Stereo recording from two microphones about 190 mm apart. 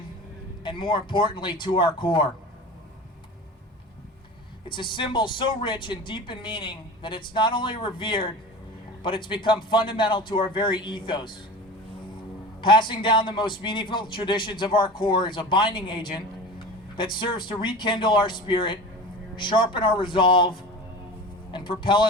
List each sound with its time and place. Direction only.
0.6 s speech: 25° left (ahead or behind)
4.7 s speech: 25° left (ahead or behind)
12.6 s speech: 25° left (ahead or behind)